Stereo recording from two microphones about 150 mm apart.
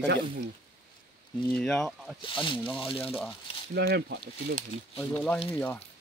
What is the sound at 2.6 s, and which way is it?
Speech, 10° left (ahead or behind).